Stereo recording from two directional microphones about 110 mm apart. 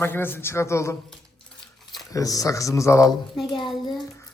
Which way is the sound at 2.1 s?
30° left (ahead or behind).